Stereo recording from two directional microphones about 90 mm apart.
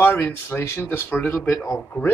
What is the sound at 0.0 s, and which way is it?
A woman's voice, 20° left (ahead or behind).